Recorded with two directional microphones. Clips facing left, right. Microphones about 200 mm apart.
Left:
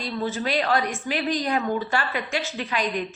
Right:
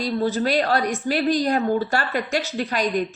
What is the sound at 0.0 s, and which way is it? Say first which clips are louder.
Speech: right 5 dB; 35° right (ahead or behind).